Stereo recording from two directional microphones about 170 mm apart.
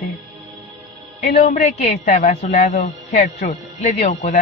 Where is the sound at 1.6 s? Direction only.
40° left (ahead or behind).